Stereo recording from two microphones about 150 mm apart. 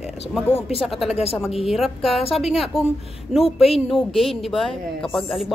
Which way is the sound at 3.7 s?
Centre (ahead or behind).